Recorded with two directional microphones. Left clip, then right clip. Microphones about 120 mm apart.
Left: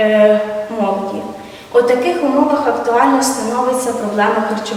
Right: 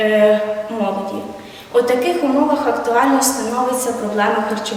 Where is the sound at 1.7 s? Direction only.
5° right (ahead or behind).